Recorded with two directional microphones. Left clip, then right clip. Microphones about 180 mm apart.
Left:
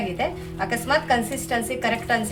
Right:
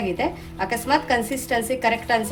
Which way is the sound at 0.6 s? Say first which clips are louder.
Right 1 dB; 25° right (ahead or behind).